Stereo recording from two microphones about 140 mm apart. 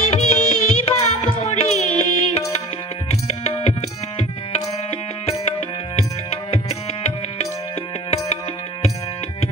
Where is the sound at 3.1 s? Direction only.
50° left (ahead or behind).